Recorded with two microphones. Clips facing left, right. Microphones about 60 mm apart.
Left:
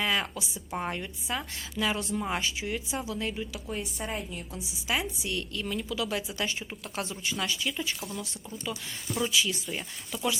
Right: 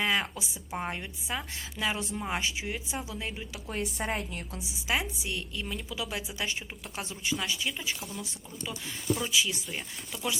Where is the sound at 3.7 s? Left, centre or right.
Right.